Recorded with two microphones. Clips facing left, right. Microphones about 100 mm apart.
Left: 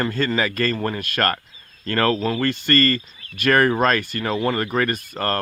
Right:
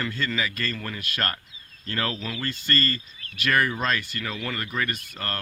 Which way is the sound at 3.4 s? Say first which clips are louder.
Left 7 dB; 50° left (ahead or behind).